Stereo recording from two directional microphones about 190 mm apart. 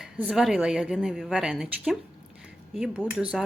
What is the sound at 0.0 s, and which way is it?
Speech, 5° right (ahead or behind).